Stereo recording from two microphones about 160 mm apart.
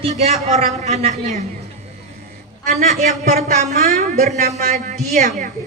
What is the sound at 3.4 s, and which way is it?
A man's voice, 45° right (ahead or behind).